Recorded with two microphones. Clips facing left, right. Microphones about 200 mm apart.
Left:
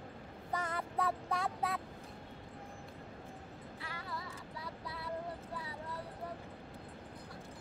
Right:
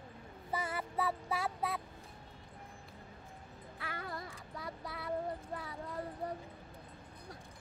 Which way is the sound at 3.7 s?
55° right (ahead or behind).